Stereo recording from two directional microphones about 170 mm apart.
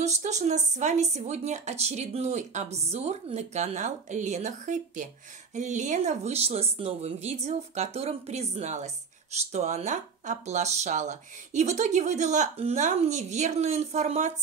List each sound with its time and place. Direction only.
0.0 s a woman's voice: 45° right (ahead or behind)